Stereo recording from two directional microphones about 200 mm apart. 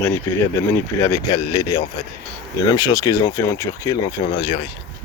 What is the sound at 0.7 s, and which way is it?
Speech, 15° left (ahead or behind).